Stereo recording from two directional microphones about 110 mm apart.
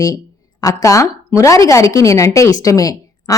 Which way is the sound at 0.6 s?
30° left (ahead or behind).